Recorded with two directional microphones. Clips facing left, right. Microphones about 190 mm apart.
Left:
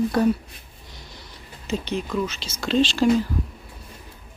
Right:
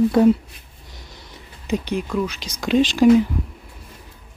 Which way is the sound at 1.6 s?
15° right (ahead or behind).